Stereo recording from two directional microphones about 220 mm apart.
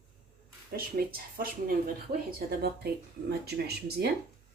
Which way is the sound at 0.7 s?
40° right (ahead or behind).